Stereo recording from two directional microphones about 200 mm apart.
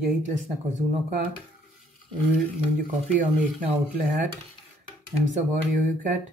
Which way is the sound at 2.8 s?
40° right (ahead or behind).